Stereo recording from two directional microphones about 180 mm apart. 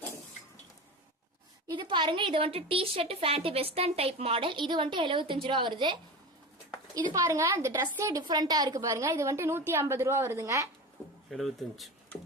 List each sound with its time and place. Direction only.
1.6 s a woman's voice: 25° right (ahead or behind)
7.1 s a woman's voice: 15° right (ahead or behind)
11.3 s speech: centre (ahead or behind)